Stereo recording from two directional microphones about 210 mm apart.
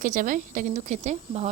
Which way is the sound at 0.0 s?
40° right (ahead or behind).